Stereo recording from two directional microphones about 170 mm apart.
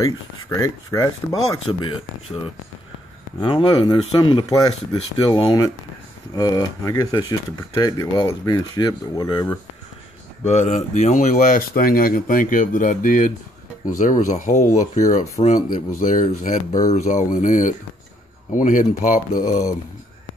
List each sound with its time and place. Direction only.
0.0 s speech: 20° left (ahead or behind)
1.7 s speech: 30° left (ahead or behind)
10.4 s speech: 40° left (ahead or behind)